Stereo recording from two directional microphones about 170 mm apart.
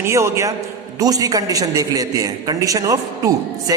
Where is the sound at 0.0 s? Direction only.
15° right (ahead or behind).